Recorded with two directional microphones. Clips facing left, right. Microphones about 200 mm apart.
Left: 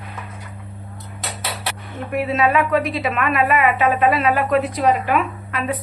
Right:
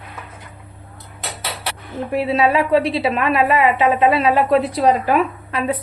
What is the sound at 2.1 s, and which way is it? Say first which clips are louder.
A woman's voice: right 2 dB; 30° right (ahead or behind).